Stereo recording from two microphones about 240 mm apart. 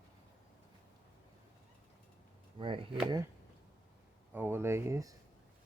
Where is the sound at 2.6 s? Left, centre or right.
Right.